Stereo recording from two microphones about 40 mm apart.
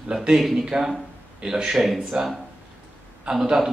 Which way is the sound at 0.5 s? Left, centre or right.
Centre.